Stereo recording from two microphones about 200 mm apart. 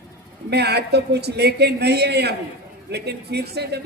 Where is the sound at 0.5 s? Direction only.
55° right (ahead or behind).